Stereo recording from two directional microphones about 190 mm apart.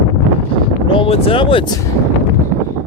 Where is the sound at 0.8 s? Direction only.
25° left (ahead or behind).